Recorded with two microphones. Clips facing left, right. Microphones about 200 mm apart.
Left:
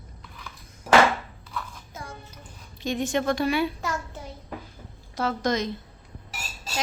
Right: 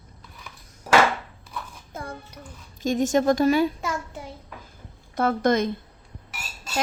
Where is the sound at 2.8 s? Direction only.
45° right (ahead or behind).